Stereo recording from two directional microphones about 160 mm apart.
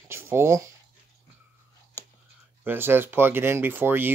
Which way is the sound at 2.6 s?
15° right (ahead or behind).